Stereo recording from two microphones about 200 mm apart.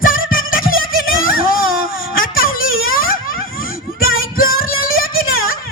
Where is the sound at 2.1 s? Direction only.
45° left (ahead or behind).